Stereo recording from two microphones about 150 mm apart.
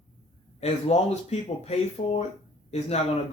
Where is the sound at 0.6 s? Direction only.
45° left (ahead or behind).